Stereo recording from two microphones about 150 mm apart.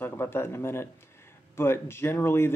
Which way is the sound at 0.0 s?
15° left (ahead or behind).